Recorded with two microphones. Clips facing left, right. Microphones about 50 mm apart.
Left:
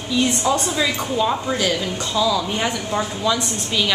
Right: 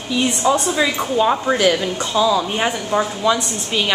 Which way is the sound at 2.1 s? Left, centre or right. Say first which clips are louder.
Right 3 dB; right.